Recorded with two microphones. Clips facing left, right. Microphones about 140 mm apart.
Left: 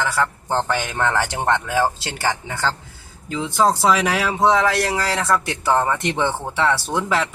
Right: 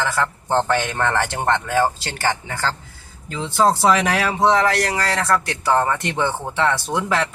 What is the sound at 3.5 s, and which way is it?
A man's voice, 5° right (ahead or behind).